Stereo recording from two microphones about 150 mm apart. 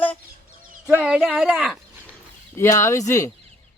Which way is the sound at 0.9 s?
5° right (ahead or behind).